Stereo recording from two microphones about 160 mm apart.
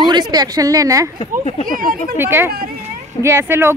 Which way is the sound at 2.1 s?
15° right (ahead or behind).